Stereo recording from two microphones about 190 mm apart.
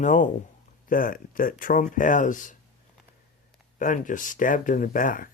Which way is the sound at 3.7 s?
45° left (ahead or behind).